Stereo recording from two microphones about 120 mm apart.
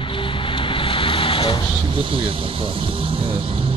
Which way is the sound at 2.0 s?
50° right (ahead or behind).